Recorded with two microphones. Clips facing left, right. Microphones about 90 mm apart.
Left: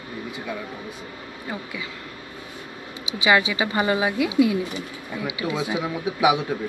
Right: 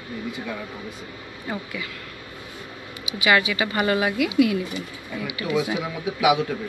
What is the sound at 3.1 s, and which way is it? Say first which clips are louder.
Speech: left 1 dB; 25° left (ahead or behind).